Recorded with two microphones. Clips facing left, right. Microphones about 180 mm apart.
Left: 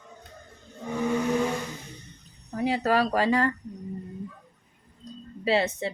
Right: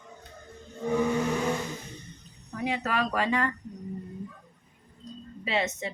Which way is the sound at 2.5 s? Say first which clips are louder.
Left 6 dB; 35° left (ahead or behind).